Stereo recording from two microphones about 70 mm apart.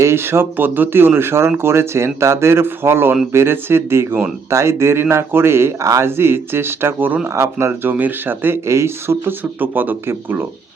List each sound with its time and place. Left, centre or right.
0.0 s speech: right
7.7 s speech: right
8.6 s speech: right
9.4 s speech: right